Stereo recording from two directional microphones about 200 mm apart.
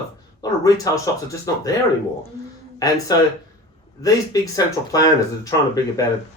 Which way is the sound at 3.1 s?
20° left (ahead or behind).